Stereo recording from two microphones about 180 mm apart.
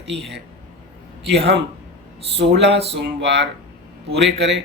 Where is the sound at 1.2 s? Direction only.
70° right (ahead or behind).